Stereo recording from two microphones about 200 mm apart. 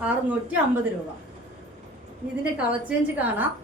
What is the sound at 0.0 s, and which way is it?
Speech, 10° right (ahead or behind).